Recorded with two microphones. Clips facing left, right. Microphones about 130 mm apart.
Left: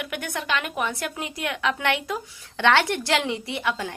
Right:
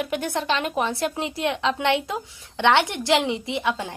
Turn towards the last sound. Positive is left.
turn(degrees=-20)  # may be behind; listen again after turning